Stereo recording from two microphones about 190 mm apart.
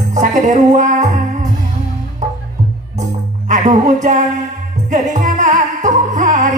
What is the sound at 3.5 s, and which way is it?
Speech, 40° right (ahead or behind).